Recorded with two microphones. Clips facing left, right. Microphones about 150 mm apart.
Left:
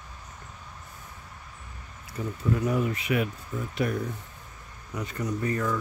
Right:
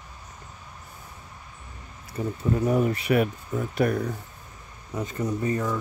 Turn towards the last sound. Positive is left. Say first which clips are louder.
# right 2 dB
turn(degrees=-20)  # may be behind; listen again after turning